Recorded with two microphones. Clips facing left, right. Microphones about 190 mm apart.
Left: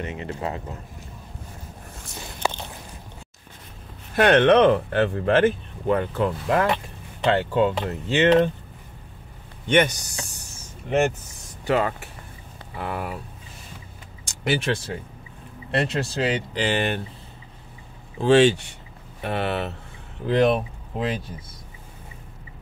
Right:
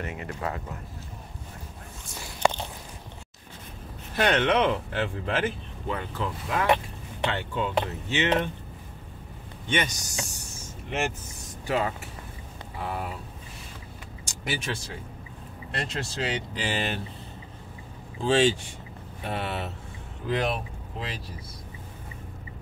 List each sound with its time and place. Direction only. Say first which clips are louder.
0.0 s speech: left 3 dB; 25° left (ahead or behind)
4.2 s speech: left 7 dB; 55° left (ahead or behind)
7.2 s speech: left 9 dB; 70° left (ahead or behind)
9.7 s speech: left 9 dB; 60° left (ahead or behind)
11.6 s speech: left 5 dB; 65° left (ahead or behind)
14.2 s vehicle: left 8 dB; 65° left (ahead or behind)
15.7 s speech: left 9 dB; 60° left (ahead or behind)
18.2 s speech: left 6 dB; 65° left (ahead or behind)